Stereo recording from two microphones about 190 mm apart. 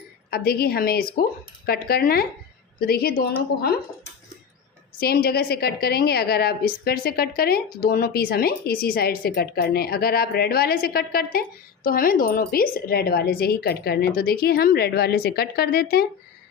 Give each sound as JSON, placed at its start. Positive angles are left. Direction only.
{"t": 0.3, "sound": "a woman's voice", "side_deg": 55}
{"t": 4.9, "sound": "a woman's voice", "side_deg": 55}